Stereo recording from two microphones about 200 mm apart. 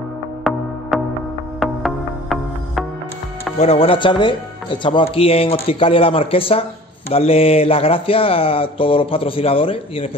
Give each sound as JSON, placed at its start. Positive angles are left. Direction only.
{"t": 0.4, "sound": "music", "side_deg": 0}
{"t": 3.5, "sound": "speech", "side_deg": 30}